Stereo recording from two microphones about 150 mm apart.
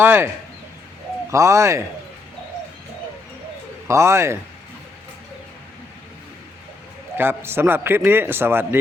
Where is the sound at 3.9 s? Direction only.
20° right (ahead or behind).